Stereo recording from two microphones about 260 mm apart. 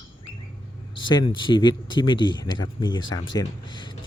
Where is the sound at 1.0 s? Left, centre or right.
Centre.